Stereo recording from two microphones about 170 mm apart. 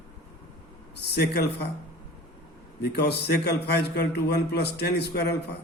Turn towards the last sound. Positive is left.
turn(degrees=75)  # may be behind; listen again after turning